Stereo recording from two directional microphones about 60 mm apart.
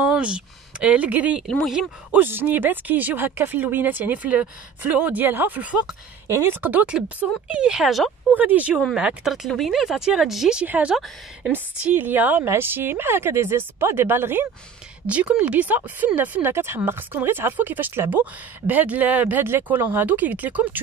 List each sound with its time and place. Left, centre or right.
0.0 s speech: centre
6.2 s speech: right
6.6 s speech: right
8.3 s speech: right
9.2 s speech: centre
10.6 s speech: right
11.5 s speech: right
15.0 s speech: right
18.2 s speech: right
19.4 s speech: right